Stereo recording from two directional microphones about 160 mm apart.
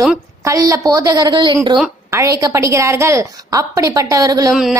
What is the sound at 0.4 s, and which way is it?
A woman's voice, 20° right (ahead or behind).